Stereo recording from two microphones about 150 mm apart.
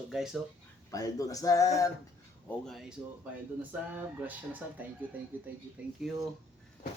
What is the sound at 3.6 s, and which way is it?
Speech, 10° right (ahead or behind).